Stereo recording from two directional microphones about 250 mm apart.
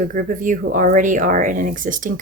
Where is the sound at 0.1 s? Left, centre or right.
Right.